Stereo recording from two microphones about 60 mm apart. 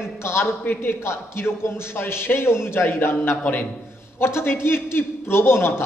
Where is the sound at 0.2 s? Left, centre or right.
Left.